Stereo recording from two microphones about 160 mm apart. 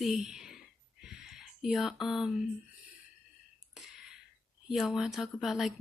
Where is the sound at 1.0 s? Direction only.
5° right (ahead or behind).